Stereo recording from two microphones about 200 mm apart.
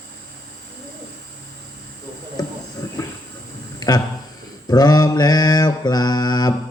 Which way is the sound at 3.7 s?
20° left (ahead or behind).